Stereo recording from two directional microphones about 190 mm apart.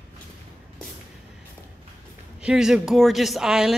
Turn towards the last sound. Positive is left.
turn(degrees=0)  # may be behind; listen again after turning